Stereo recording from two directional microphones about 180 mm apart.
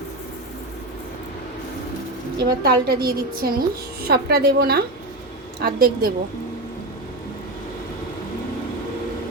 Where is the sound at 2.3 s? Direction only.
60° right (ahead or behind).